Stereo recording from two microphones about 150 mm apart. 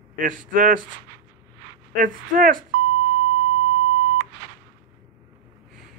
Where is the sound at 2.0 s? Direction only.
65° right (ahead or behind).